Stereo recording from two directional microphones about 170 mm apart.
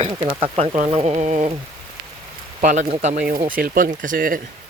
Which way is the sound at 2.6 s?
45° right (ahead or behind).